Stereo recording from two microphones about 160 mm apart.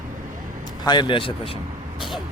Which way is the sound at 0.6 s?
25° left (ahead or behind).